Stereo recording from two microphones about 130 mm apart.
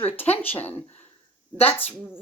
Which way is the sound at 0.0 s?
15° left (ahead or behind).